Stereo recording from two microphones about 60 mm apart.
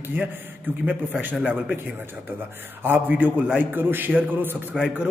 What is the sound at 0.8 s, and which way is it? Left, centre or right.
Speech, right.